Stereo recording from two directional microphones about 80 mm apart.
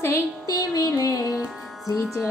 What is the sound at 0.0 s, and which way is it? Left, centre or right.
Music, left.